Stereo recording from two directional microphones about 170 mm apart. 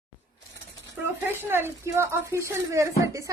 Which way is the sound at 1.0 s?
15° right (ahead or behind).